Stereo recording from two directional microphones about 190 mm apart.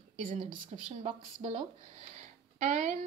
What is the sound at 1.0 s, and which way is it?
Speech, 30° right (ahead or behind).